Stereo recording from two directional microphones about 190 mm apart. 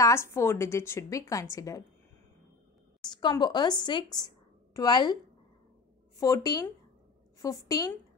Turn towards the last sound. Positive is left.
turn(degrees=20)  # may be behind; listen again after turning